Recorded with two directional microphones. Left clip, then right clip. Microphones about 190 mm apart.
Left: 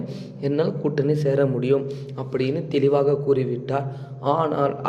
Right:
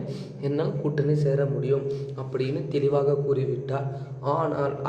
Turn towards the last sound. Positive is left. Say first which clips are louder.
# left 4 dB
turn(degrees=35)  # may be behind; listen again after turning